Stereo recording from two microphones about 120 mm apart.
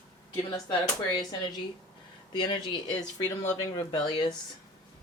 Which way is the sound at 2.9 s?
75° left (ahead or behind).